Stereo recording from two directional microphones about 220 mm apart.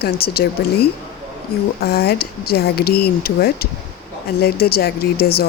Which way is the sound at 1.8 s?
45° left (ahead or behind).